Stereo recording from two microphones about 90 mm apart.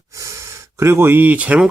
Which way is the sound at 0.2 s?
35° right (ahead or behind).